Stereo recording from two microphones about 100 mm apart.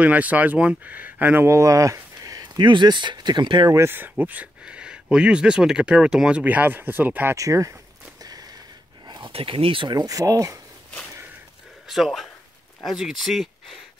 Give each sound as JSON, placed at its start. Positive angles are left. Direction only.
{"t": 0.0, "sound": "speech", "side_deg": -15}
{"t": 3.7, "sound": "speech", "side_deg": -25}
{"t": 7.3, "sound": "speech", "side_deg": -35}
{"t": 8.2, "sound": "a sound", "side_deg": -40}
{"t": 9.3, "sound": "speech", "side_deg": -65}
{"t": 9.9, "sound": "speech", "side_deg": -35}
{"t": 11.9, "sound": "speech", "side_deg": 0}